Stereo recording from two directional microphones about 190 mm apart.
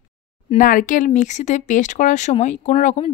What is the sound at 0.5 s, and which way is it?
Speech, 45° left (ahead or behind).